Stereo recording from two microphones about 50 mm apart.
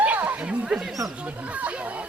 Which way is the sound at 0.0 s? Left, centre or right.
Right.